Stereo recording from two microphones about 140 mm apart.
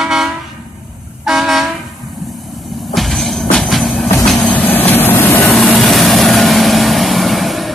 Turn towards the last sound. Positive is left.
turn(degrees=0)  # may be behind; listen again after turning